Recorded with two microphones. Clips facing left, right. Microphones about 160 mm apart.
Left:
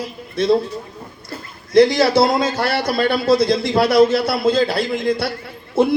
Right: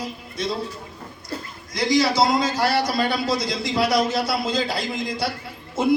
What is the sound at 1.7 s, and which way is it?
A man's voice, 60° left (ahead or behind).